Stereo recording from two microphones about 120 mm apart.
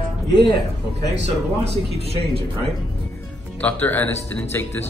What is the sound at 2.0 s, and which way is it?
Speech, 55° right (ahead or behind).